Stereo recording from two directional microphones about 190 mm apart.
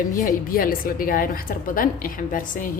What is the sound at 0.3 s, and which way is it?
A woman's voice, 50° left (ahead or behind).